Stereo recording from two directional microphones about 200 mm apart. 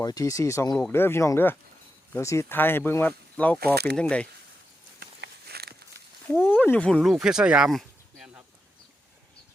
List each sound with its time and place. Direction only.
0.0 s speech: 20° left (ahead or behind)
4.9 s a sound: 55° right (ahead or behind)
6.3 s speech: 10° left (ahead or behind)